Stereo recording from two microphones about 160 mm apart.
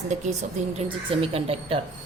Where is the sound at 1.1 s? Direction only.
35° right (ahead or behind).